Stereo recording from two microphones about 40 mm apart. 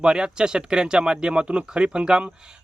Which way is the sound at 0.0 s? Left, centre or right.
Right.